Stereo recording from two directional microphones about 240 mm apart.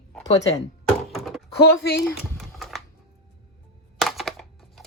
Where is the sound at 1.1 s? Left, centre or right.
Centre.